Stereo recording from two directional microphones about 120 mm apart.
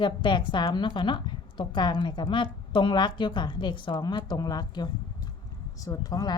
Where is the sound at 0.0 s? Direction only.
40° left (ahead or behind).